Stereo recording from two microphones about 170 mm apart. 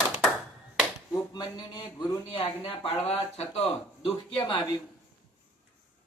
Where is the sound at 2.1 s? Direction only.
30° left (ahead or behind).